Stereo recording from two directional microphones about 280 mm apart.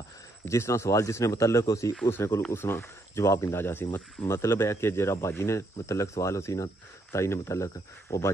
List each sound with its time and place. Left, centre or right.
0.5 s speech: centre